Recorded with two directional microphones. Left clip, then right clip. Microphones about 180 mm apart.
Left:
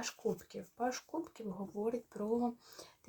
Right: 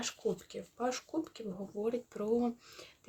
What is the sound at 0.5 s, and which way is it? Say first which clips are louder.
Speech: right 2 dB; 20° right (ahead or behind).